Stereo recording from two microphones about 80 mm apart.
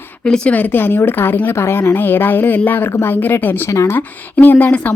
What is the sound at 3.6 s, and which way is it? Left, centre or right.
Speech, left.